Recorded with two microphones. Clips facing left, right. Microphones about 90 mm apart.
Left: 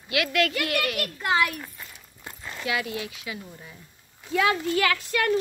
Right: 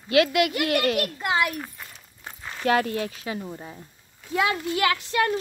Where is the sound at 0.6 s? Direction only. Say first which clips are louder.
Right 4 dB; 35° right (ahead or behind).